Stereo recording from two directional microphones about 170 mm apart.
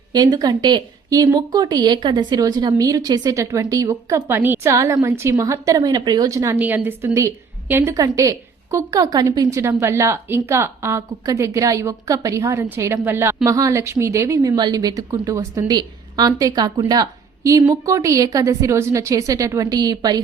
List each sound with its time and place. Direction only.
0.1 s a woman's voice: 20° right (ahead or behind)